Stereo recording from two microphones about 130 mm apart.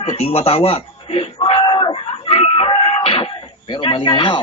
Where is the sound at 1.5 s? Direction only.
50° left (ahead or behind).